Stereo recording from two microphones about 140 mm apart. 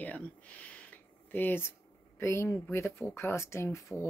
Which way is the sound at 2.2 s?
20° left (ahead or behind).